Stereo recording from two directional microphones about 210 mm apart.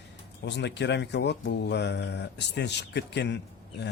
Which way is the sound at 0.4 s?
55° left (ahead or behind).